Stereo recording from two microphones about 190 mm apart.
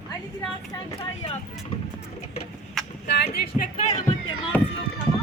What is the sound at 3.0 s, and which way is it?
Speech, 55° left (ahead or behind).